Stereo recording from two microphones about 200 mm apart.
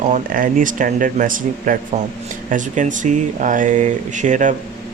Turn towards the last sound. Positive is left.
turn(degrees=-40)  # may be behind; listen again after turning